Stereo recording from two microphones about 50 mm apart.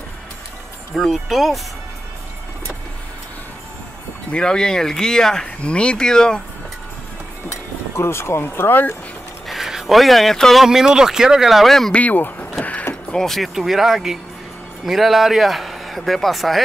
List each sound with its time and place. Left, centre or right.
0.9 s speech: centre
4.3 s speech: centre
5.6 s speech: left
7.9 s speech: left
9.5 s speech: centre
10.6 s speech: centre
11.9 s speech: left
13.1 s speech: centre
13.6 s speech: centre